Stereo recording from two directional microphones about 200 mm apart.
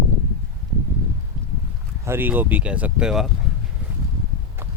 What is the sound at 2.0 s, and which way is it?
Speech, 10° right (ahead or behind).